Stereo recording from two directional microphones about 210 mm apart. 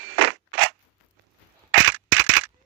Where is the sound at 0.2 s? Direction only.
80° right.